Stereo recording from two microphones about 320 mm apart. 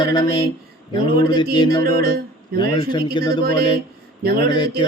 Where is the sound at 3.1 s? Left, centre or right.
Centre.